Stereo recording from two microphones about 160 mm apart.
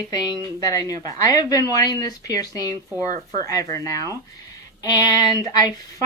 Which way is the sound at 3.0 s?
50° right (ahead or behind).